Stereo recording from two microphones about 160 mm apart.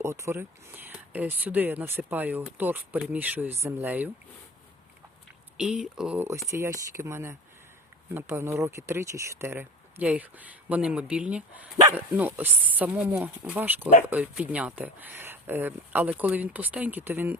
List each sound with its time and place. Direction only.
0.0 s speech: 15° right (ahead or behind)
5.5 s speech: 5° right (ahead or behind)
6.5 s speech: 20° right (ahead or behind)